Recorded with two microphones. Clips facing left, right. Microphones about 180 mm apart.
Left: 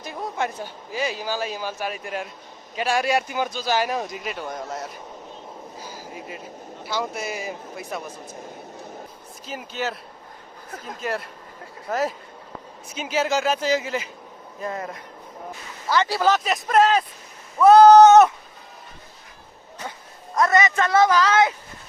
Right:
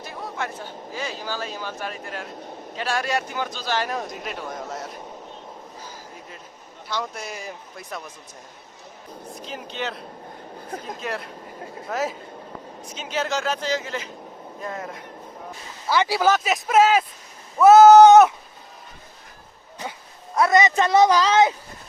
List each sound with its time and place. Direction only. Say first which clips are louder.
0.0 s a man's voice: left 3 dB; 20° left (ahead or behind); by 4.9 s centre (ahead or behind)
5.8 s a sound: left 4 dB; 10° left (ahead or behind)
6.8 s speech: left 3 dB; 5° left (ahead or behind)
9.5 s speech: left 2 dB; 5° left (ahead or behind)
11.0 s a man's voice: left 2 dB; centre (ahead or behind)
20.3 s a man's voice: right 1 dB; 15° right (ahead or behind)